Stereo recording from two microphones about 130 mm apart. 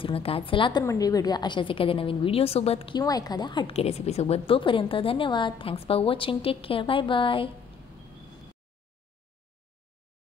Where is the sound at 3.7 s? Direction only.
50° left (ahead or behind).